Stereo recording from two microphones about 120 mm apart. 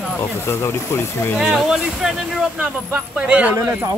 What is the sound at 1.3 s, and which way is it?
Speech, 5° right (ahead or behind).